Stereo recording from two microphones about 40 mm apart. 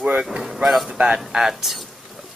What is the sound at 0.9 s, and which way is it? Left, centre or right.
Speech, right.